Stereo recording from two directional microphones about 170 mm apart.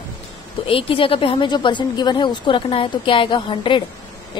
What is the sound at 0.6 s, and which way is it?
A woman's voice, 30° left (ahead or behind).